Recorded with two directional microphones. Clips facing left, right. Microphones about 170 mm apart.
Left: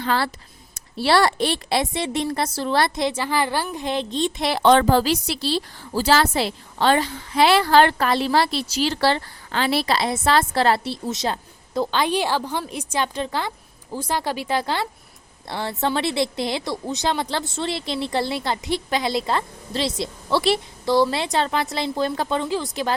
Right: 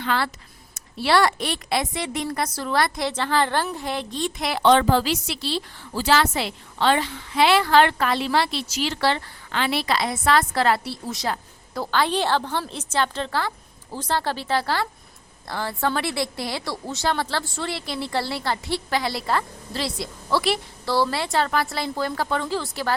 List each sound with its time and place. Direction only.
0.0 s a woman's voice: 35° left (ahead or behind)
3.1 s speech: 10° left (ahead or behind)
3.8 s a woman's voice: 20° left (ahead or behind)
4.6 s a woman's voice: 45° left (ahead or behind); by 23.0 s 20° left (ahead or behind)